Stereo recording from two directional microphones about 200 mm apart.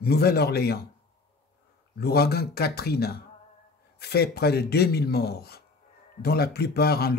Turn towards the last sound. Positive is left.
turn(degrees=50)  # may be behind; listen again after turning